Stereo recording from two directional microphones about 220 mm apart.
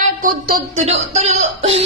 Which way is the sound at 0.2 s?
40° right (ahead or behind).